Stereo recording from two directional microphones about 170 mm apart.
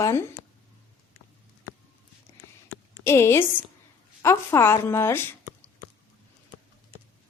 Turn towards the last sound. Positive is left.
turn(degrees=15)  # may be behind; listen again after turning